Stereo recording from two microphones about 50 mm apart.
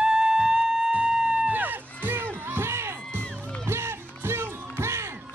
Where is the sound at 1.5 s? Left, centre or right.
Right.